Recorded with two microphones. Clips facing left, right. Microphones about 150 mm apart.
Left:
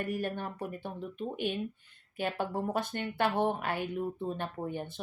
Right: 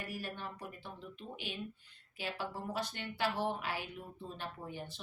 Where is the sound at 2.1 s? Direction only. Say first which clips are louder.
Left 8 dB; 55° left (ahead or behind).